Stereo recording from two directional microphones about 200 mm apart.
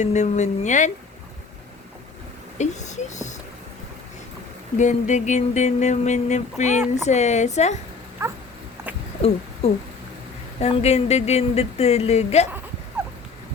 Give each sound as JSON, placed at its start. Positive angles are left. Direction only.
{"t": 0.0, "sound": "speech", "side_deg": 35}
{"t": 2.6, "sound": "speech", "side_deg": 35}
{"t": 4.8, "sound": "speech", "side_deg": 35}
{"t": 10.6, "sound": "speech", "side_deg": 35}
{"t": 13.0, "sound": "dog", "side_deg": -10}